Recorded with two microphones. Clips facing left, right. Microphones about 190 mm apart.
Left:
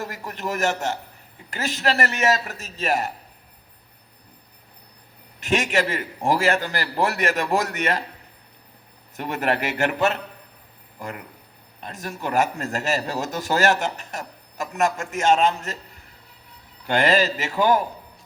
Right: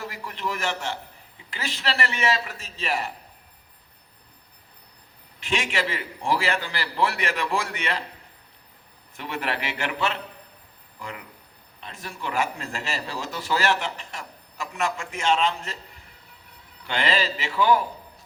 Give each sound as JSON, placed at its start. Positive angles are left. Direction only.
{"t": 0.0, "sound": "a man's voice", "side_deg": 45}
{"t": 5.4, "sound": "a man's voice", "side_deg": 45}
{"t": 9.1, "sound": "a man's voice", "side_deg": 45}
{"t": 16.8, "sound": "a man's voice", "side_deg": 45}